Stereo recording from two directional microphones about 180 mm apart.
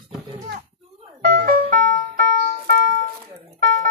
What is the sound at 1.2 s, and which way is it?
Music, 50° right (ahead or behind).